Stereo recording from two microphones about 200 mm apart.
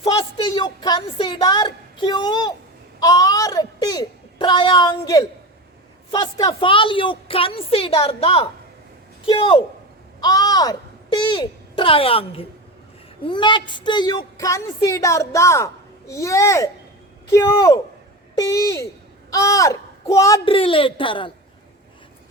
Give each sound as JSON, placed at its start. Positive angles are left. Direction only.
{"t": 0.0, "sound": "a woman's voice", "side_deg": 25}
{"t": 20.4, "sound": "a woman's voice", "side_deg": 25}